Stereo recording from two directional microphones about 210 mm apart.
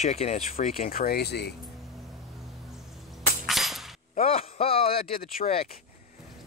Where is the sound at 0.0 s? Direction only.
30° left (ahead or behind); by 1.5 s 50° left (ahead or behind).